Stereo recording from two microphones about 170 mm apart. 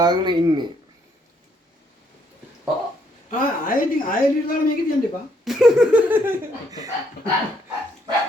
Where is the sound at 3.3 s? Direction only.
55° left (ahead or behind).